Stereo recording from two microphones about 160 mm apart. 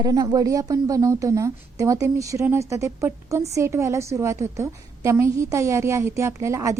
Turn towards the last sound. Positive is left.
turn(degrees=-20)  # may be behind; listen again after turning